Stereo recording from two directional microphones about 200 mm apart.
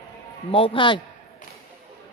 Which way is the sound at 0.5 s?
25° left (ahead or behind).